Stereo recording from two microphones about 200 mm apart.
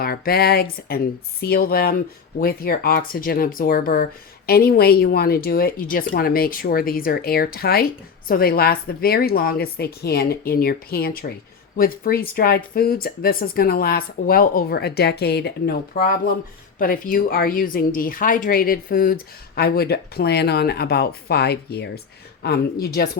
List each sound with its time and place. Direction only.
0.0 s speech: 50° left (ahead or behind)